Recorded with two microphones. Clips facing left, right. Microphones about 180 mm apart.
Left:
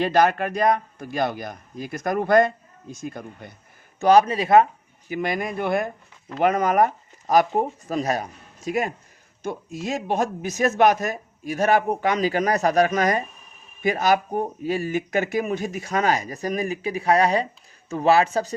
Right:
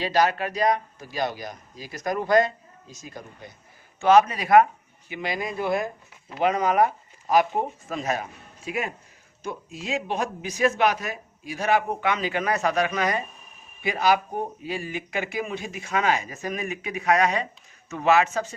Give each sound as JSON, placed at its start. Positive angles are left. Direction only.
{"t": 0.0, "sound": "speech", "side_deg": 55}
{"t": 4.0, "sound": "speech", "side_deg": 35}
{"t": 5.0, "sound": "speech", "side_deg": 45}